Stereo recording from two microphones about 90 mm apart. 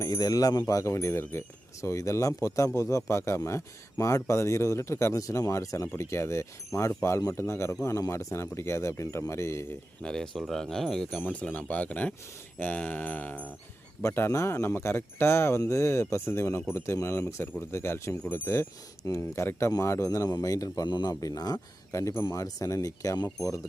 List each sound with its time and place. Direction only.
0.0 s speech: 45° left (ahead or behind)
10.0 s speech: 5° left (ahead or behind)
11.2 s a sound: 15° left (ahead or behind)
14.0 s speech: 25° left (ahead or behind)
20.1 s speech: 45° left (ahead or behind)
20.8 s speech: 55° left (ahead or behind)
21.9 s speech: 35° left (ahead or behind)